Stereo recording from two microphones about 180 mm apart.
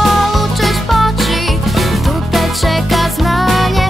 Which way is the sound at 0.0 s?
Centre (ahead or behind).